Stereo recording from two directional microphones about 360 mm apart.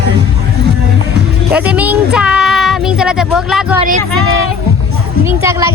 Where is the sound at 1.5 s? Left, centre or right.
Centre.